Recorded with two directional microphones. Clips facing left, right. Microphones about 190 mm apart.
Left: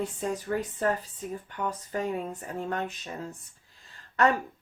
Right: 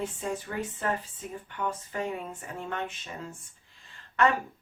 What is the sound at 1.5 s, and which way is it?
Speech, 40° left (ahead or behind).